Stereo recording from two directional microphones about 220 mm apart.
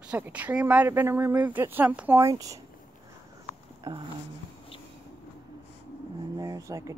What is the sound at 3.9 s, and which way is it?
Speech, 15° right (ahead or behind).